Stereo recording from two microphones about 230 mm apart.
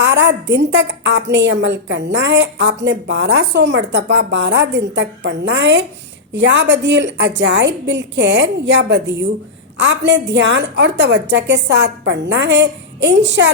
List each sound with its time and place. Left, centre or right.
0.0 s a woman's voice: right